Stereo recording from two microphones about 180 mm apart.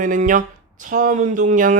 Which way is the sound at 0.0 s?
45° right (ahead or behind).